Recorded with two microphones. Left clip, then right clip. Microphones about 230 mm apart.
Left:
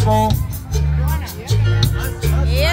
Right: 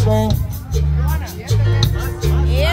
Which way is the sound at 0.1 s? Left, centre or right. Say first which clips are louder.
Left 4 dB; left.